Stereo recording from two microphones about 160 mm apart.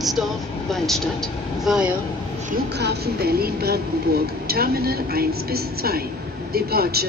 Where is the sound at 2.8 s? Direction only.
85° right.